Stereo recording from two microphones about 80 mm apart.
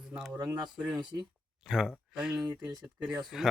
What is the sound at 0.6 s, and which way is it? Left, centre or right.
Speech, centre.